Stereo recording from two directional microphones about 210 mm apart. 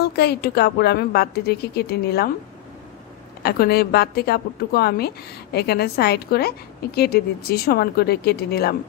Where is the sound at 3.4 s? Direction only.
50° left (ahead or behind).